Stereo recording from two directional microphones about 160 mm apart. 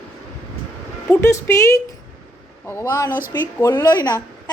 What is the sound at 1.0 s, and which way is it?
A woman's voice, 15° left (ahead or behind).